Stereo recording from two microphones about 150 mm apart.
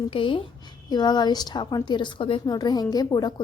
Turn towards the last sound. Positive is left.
turn(degrees=25)  # may be behind; listen again after turning